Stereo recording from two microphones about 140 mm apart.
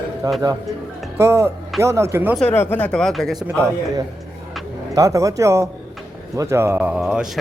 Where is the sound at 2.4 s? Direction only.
15° left (ahead or behind).